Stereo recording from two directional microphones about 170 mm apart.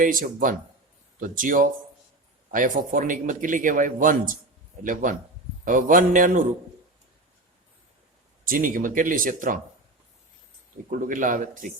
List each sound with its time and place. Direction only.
0.0 s speech: 55° right (ahead or behind)
8.4 s speech: 55° right (ahead or behind)
10.8 s speech: 50° right (ahead or behind)